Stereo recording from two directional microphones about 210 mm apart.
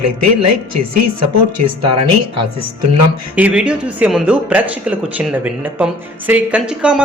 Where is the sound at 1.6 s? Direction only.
25° right (ahead or behind).